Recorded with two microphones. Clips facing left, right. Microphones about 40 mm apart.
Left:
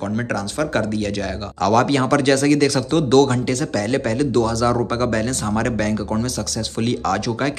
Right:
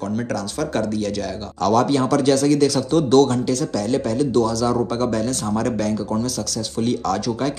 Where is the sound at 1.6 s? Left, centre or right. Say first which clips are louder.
Left 1 dB; left.